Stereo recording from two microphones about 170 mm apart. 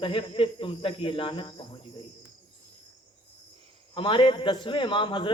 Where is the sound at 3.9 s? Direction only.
30° left (ahead or behind).